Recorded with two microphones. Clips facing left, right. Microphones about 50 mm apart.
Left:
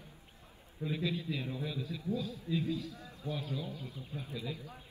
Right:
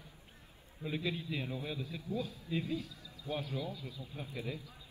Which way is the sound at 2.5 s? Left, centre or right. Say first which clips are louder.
Left 3 dB; right.